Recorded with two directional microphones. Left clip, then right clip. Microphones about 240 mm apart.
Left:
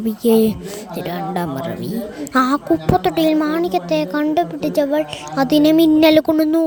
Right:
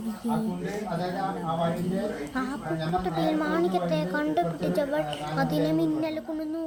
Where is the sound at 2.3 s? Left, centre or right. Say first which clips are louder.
Left 15 dB; left.